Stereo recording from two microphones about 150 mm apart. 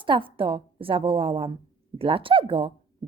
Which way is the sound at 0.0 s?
35° right (ahead or behind).